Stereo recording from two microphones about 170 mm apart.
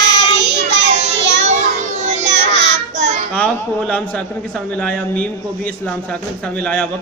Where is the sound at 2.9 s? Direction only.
45° right (ahead or behind).